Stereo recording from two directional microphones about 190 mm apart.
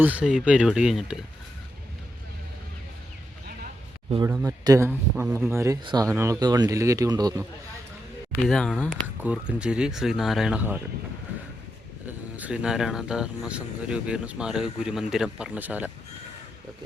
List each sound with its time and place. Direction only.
0.0 s speech: 10° right (ahead or behind)
4.3 s speech: 15° right (ahead or behind)
8.4 s speech: 5° left (ahead or behind)
12.4 s speech: 5° right (ahead or behind)